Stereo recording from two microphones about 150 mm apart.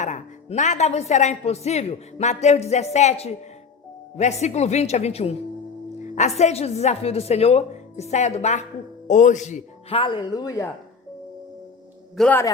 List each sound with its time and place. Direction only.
0.0 s speech: 55° left (ahead or behind)
9.9 s speech: 35° left (ahead or behind)
12.1 s a man's voice: 5° left (ahead or behind)